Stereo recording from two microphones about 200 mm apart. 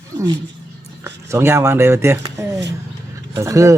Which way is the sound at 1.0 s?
10° right (ahead or behind).